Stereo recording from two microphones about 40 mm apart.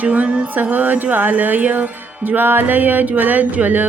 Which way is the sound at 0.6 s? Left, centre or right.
Right.